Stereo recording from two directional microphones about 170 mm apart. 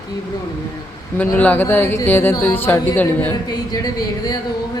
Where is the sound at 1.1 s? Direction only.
10° left (ahead or behind).